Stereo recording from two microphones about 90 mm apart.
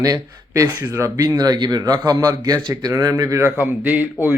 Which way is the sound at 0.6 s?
20° right (ahead or behind).